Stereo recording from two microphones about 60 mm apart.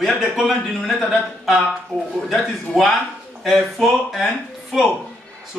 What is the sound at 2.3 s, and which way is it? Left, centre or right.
A man's voice, centre.